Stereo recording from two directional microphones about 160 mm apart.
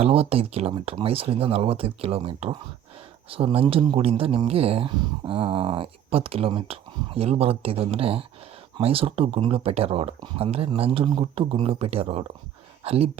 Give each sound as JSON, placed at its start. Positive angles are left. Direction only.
{"t": 0.0, "sound": "speech", "side_deg": -40}